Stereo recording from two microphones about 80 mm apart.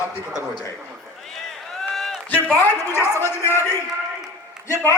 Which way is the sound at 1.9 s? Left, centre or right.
Centre.